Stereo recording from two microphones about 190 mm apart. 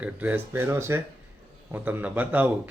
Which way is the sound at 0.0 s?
10° right (ahead or behind).